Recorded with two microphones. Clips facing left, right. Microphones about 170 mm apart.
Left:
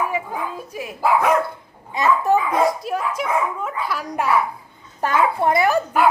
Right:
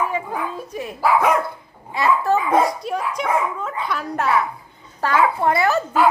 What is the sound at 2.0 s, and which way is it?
Speech, 20° left (ahead or behind).